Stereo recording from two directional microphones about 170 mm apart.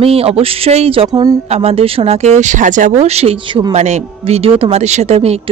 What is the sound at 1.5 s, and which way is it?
A woman's voice, 35° right (ahead or behind).